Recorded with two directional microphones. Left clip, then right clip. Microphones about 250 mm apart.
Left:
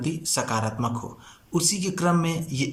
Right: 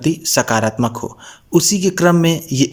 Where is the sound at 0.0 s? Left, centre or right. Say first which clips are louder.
Right 11 dB; right.